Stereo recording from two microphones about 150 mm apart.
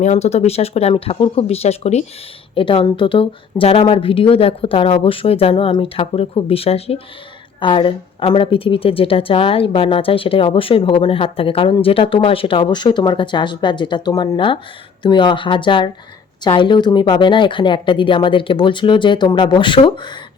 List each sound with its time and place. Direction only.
0.0 s speech: 45° left (ahead or behind)
2.6 s a woman's voice: 35° left (ahead or behind)